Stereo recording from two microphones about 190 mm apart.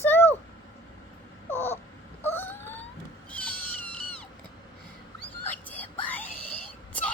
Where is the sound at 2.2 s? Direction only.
10° left (ahead or behind).